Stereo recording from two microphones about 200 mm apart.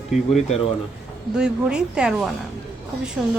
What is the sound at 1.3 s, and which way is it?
A woman's voice, 5° right (ahead or behind).